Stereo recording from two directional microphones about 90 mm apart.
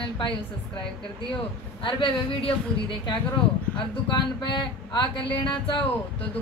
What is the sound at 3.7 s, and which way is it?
Speech, 60° left (ahead or behind).